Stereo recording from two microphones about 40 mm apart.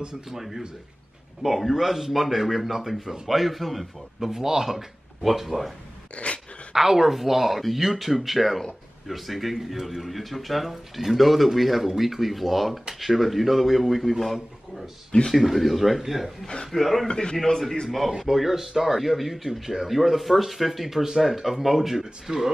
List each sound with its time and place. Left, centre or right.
0.0 s speech: centre
0.4 s a man's voice: centre
6.1 s dog: left
6.7 s a man's voice: centre
17.1 s a man's voice: left
17.5 s a man's voice: centre
18.1 s speech: centre